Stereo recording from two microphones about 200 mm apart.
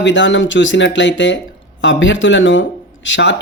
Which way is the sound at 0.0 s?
65° left (ahead or behind).